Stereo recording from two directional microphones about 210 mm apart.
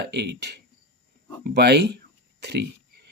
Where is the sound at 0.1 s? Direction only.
55° right (ahead or behind).